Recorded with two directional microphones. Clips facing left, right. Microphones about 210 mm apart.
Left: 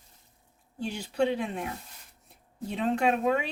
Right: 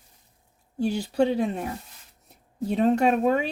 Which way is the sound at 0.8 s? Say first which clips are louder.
Right 5 dB; 40° right (ahead or behind).